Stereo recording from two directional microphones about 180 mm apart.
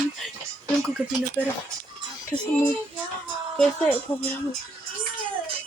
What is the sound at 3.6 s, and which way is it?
Speech, 10° left (ahead or behind).